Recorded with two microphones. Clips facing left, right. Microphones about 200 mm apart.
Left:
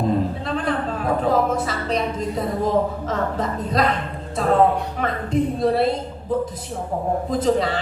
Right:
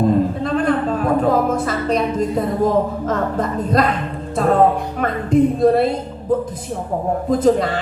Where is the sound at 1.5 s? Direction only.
50° right (ahead or behind).